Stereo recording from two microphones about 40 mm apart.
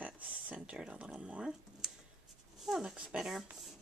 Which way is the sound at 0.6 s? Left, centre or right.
Right.